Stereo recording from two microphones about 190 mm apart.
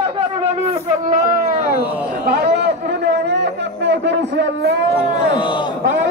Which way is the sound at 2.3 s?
60° right (ahead or behind).